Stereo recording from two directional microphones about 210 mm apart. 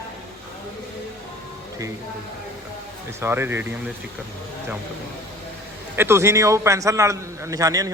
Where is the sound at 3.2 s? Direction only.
10° right (ahead or behind).